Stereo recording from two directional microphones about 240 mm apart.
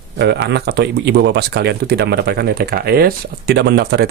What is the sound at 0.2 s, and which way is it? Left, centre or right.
Speech, right.